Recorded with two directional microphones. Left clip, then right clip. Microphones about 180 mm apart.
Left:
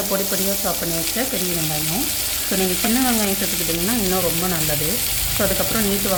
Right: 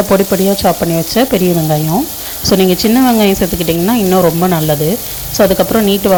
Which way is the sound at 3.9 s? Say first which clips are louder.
Right 13 dB; 25° right (ahead or behind).